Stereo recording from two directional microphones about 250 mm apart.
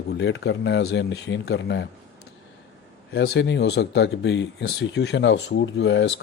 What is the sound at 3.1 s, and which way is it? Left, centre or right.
Speech, left.